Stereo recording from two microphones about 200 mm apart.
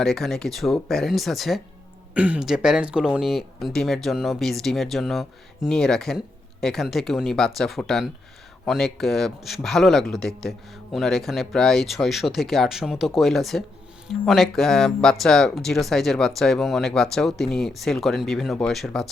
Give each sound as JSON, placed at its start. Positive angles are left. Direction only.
{"t": 0.0, "sound": "speech", "side_deg": 0}